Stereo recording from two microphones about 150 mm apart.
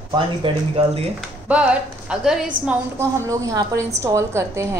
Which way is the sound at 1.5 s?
10° right (ahead or behind).